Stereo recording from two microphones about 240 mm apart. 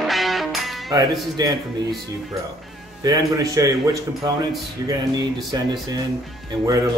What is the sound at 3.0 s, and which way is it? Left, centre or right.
A man's voice, centre.